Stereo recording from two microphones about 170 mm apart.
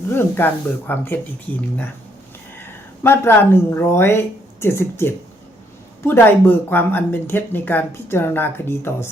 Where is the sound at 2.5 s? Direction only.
15° left (ahead or behind).